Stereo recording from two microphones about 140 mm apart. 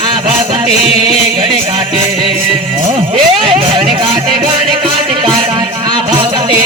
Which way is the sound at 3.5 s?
35° right (ahead or behind).